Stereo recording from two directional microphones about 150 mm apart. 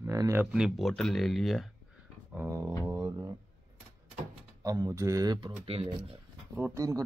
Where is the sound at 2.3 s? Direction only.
15° right (ahead or behind).